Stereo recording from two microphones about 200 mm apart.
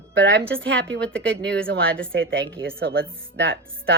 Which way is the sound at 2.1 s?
70° right (ahead or behind).